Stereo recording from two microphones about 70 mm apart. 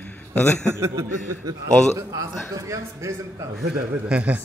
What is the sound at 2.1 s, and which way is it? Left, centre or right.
A man's voice, right.